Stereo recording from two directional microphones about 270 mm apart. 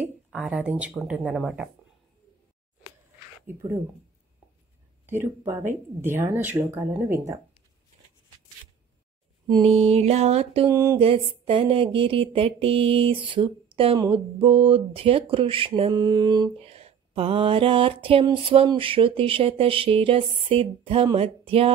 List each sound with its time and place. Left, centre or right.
0.0 s speech: centre
3.4 s speech: centre
5.0 s speech: centre
9.5 s a sound: right